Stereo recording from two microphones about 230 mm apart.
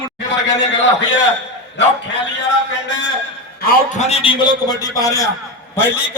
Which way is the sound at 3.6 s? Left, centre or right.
Left.